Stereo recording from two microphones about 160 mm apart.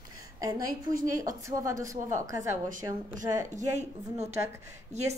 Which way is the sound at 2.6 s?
55° right (ahead or behind).